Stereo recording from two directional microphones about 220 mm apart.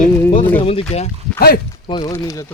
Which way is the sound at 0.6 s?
25° left (ahead or behind).